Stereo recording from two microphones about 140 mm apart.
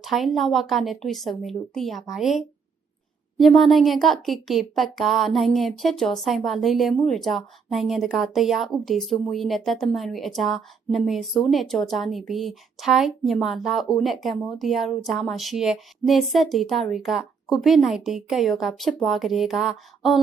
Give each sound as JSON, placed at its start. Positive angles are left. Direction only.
{"t": 0.0, "sound": "a woman's voice", "side_deg": 0}